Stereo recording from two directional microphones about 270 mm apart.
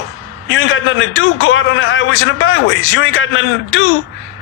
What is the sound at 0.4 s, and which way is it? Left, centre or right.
A man's voice, left.